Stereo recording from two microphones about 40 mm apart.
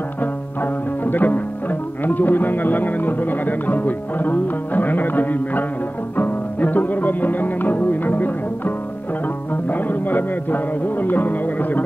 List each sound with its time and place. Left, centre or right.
1.0 s music: left
2.0 s speech: left